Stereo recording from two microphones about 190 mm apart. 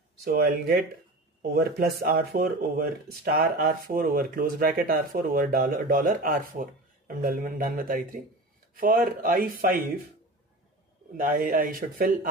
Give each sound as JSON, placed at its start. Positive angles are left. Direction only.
{"t": 0.2, "sound": "speech", "side_deg": -50}
{"t": 11.1, "sound": "speech", "side_deg": -45}